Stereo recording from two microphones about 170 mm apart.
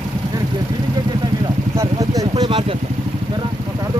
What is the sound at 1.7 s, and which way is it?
Speech, 20° right (ahead or behind).